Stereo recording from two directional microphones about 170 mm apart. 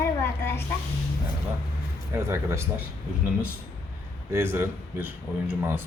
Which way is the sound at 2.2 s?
15° right (ahead or behind).